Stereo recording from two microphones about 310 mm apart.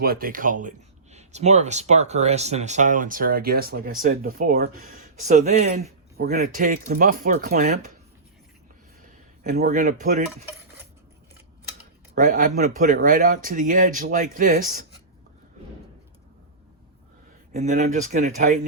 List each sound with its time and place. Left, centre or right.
0.0 s speech: right
9.0 s speech: right
12.1 s speech: right
17.5 s speech: right